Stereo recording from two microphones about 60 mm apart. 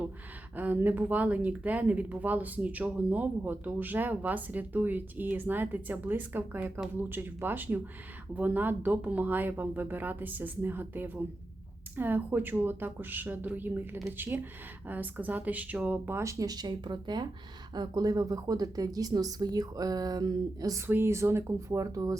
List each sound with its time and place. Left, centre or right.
0.5 s speech: right
16.2 s speech: right
18.0 s speech: right
20.8 s speech: right